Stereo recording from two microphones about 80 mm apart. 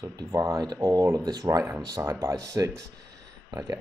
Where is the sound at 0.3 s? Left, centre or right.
Right.